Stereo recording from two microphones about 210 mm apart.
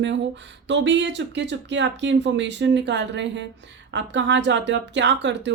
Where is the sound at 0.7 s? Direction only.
60° right (ahead or behind).